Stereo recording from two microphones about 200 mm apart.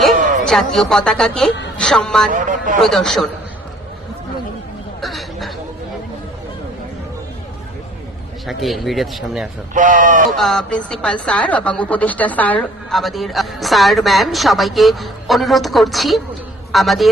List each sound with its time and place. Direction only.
0.4 s a woman's voice: centre (ahead or behind)
2.3 s speech: 40° right (ahead or behind)
2.7 s a woman's voice: centre (ahead or behind)
4.9 s a sound: centre (ahead or behind)
8.4 s a woman's voice: centre (ahead or behind)
9.7 s speech: 40° right (ahead or behind)
10.3 s a woman's voice: centre (ahead or behind)